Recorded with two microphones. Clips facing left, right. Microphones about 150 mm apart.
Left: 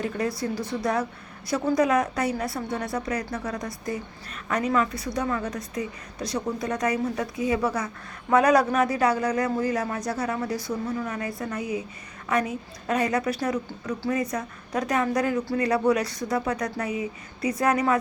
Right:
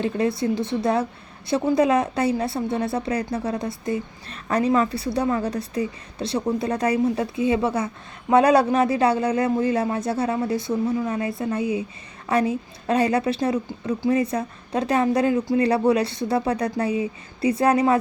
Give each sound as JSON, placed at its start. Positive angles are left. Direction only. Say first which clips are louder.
{"t": 0.0, "sound": "a woman's voice", "louder": "right 5 dB", "side_deg": -25}